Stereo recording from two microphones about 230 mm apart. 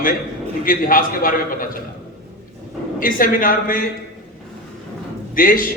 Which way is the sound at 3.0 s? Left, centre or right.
Left.